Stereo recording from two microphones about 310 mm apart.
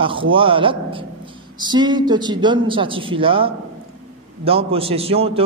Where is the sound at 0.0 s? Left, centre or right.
Centre.